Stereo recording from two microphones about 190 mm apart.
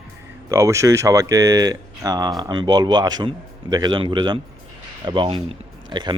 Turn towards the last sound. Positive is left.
turn(degrees=-25)  # may be behind; listen again after turning